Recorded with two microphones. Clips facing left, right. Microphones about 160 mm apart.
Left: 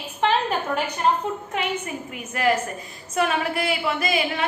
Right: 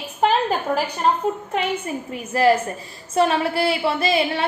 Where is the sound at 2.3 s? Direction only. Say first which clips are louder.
Right 5 dB; 30° right (ahead or behind).